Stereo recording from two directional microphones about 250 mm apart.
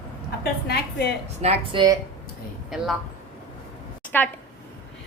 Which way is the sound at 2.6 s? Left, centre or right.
Centre.